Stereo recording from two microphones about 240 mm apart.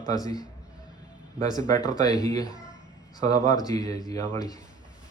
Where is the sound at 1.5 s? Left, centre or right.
Centre.